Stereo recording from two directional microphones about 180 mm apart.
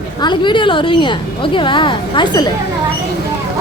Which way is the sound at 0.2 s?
25° left (ahead or behind).